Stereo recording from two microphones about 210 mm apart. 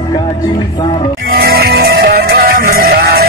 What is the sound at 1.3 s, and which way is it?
Music, 45° right (ahead or behind).